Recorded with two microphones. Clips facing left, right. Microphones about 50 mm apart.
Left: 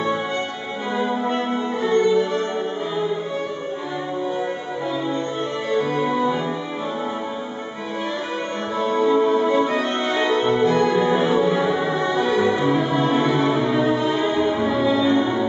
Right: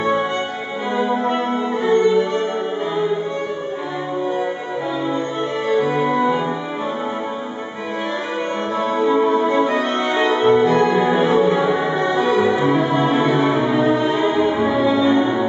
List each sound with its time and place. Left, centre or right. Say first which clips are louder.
0.9 s music: right 3 dB; centre
5.7 s music: right 3 dB; centre
8.7 s music: even; centre